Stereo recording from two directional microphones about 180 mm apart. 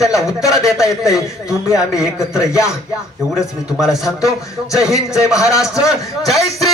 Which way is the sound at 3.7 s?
Centre (ahead or behind).